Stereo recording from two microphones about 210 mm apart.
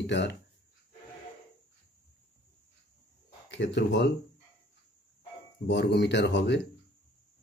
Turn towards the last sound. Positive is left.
turn(degrees=55)  # may be behind; listen again after turning